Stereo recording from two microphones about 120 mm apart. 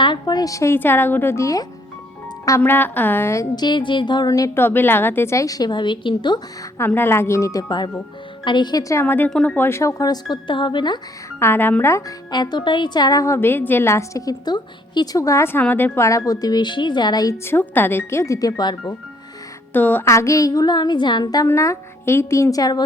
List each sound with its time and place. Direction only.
0.0 s a woman's voice: 40° left (ahead or behind)
2.6 s a woman's voice: 15° left (ahead or behind)
3.5 s a woman's voice: 35° left (ahead or behind)
6.7 s a woman's voice: 20° left (ahead or behind)
9.3 s speech: 5° left (ahead or behind)
9.6 s a woman's voice: 20° left (ahead or behind); by 11.0 s 40° left (ahead or behind)
11.3 s a woman's voice: 20° left (ahead or behind)
12.3 s a woman's voice: 35° left (ahead or behind)
19.7 s a woman's voice: 15° left (ahead or behind); by 22.8 s 30° left (ahead or behind)